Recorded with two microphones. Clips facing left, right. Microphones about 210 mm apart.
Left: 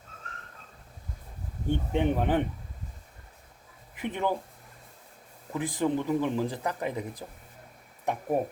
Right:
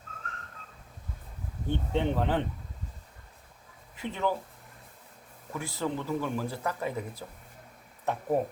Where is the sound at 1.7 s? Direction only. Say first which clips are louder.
Left 2 dB; 15° left (ahead or behind).